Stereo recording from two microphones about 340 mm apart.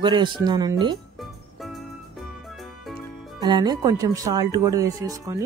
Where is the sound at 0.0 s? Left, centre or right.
Centre.